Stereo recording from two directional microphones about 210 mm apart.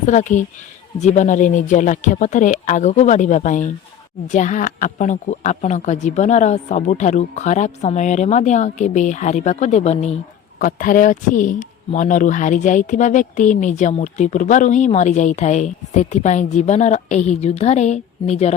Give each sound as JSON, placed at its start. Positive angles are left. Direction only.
{"t": 0.0, "sound": "speech", "side_deg": 35}